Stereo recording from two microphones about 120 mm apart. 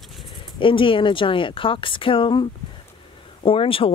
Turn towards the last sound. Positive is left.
turn(degrees=50)  # may be behind; listen again after turning